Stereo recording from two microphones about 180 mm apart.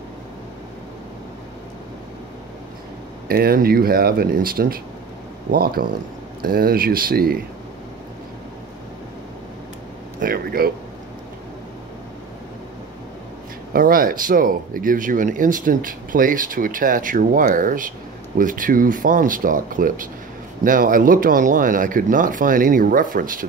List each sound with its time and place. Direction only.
3.3 s speech: 55° right (ahead or behind)
10.2 s speech: 55° right (ahead or behind)
13.7 s speech: 50° right (ahead or behind)